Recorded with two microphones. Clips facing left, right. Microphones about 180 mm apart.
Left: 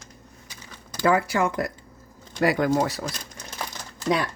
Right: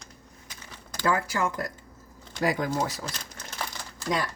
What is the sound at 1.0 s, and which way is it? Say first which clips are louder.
A woman's voice: left 5 dB; 65° left (ahead or behind).